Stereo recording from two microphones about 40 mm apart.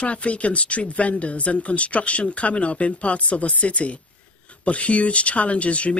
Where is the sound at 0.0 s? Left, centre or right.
Left.